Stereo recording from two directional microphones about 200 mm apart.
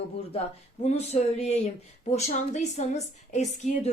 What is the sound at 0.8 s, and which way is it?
A woman's voice, 35° left (ahead or behind).